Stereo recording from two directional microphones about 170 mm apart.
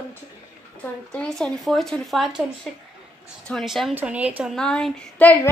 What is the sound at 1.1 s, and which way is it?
Speech, 5° left (ahead or behind).